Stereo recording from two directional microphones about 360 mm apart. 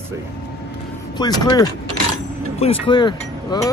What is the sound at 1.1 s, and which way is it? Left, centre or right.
Speech, centre.